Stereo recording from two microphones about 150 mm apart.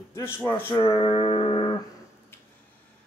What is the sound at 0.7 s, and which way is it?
Music, 25° left (ahead or behind).